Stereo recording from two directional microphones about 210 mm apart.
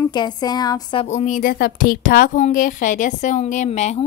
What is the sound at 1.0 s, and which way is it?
A woman's voice, 35° left (ahead or behind).